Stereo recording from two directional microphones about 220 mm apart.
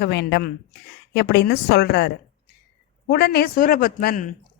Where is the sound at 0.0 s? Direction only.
50° left (ahead or behind).